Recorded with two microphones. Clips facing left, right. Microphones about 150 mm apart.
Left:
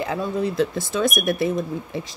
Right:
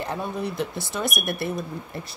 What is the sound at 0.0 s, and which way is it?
Speech, 90° left.